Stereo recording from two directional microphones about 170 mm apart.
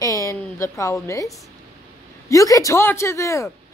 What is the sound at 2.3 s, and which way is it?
A woman's voice, 20° left (ahead or behind).